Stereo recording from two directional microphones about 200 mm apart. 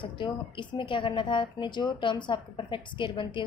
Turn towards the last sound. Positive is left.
turn(degrees=25)  # may be behind; listen again after turning